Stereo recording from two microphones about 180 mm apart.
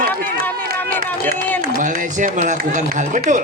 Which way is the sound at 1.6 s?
45° right (ahead or behind).